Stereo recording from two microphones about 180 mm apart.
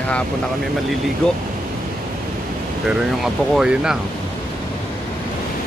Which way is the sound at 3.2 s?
5° right (ahead or behind).